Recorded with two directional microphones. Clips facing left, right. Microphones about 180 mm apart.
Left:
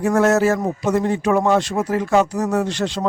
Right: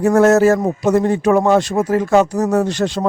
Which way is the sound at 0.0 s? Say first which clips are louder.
Right 5 dB; 45° right (ahead or behind).